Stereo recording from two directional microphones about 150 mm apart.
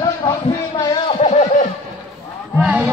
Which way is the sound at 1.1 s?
50° left (ahead or behind).